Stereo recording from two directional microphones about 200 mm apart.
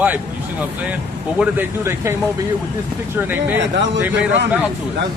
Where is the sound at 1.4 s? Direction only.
10° right (ahead or behind).